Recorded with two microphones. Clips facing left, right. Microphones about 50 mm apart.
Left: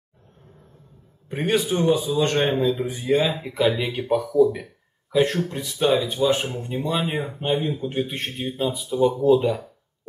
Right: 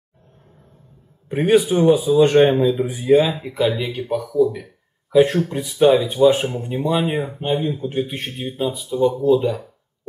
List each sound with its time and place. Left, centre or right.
1.3 s speech: centre
5.1 s speech: centre